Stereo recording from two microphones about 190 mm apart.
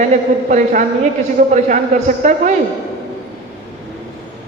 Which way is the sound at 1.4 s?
40° right (ahead or behind).